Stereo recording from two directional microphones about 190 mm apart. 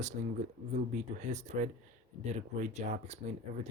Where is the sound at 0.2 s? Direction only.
40° right (ahead or behind).